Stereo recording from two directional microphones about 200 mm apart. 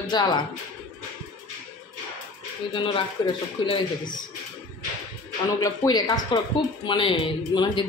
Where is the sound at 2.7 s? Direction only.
25° left (ahead or behind).